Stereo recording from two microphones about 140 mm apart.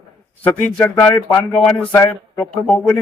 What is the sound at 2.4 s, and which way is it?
Speech, 5° left (ahead or behind).